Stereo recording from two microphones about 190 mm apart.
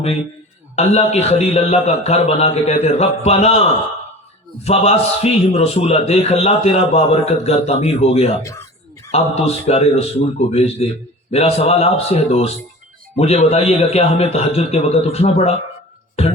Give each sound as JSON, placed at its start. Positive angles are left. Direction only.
{"t": 0.8, "sound": "a man's voice", "side_deg": 35}
{"t": 4.6, "sound": "a man's voice", "side_deg": 35}
{"t": 8.4, "sound": "speech", "side_deg": 15}
{"t": 9.1, "sound": "a man's voice", "side_deg": 35}